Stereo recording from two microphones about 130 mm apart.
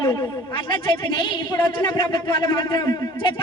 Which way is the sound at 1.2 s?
35° left (ahead or behind).